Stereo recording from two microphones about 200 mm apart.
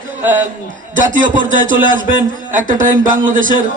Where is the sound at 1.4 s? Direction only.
75° right (ahead or behind).